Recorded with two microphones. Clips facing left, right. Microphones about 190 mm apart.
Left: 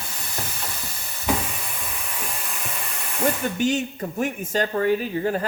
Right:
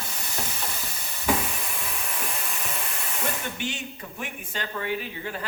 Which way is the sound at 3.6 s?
40° left (ahead or behind).